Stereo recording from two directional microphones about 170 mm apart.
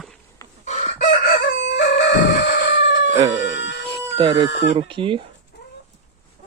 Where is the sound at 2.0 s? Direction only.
85° left.